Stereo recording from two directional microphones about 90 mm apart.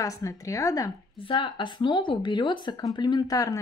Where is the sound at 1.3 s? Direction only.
60° left (ahead or behind).